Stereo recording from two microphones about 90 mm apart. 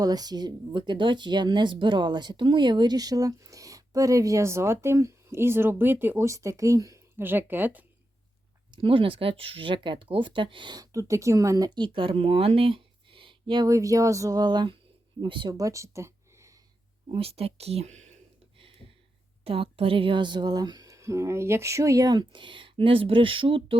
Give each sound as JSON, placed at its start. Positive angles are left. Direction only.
{"t": 0.0, "sound": "speech", "side_deg": -45}
{"t": 7.2, "sound": "speech", "side_deg": -20}
{"t": 8.7, "sound": "speech", "side_deg": -75}
{"t": 10.8, "sound": "speech", "side_deg": -35}
{"t": 11.8, "sound": "speech", "side_deg": -75}
{"t": 13.7, "sound": "speech", "side_deg": -40}
{"t": 14.4, "sound": "a woman's voice", "side_deg": -55}
{"t": 15.5, "sound": "a sound", "side_deg": -35}
{"t": 17.1, "sound": "speech", "side_deg": -90}
{"t": 19.5, "sound": "a woman's voice", "side_deg": -90}